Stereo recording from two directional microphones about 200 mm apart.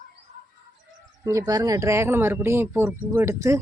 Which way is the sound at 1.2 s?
15° right (ahead or behind).